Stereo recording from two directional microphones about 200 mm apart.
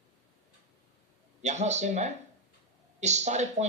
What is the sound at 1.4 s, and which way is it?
A man's voice, 35° right (ahead or behind).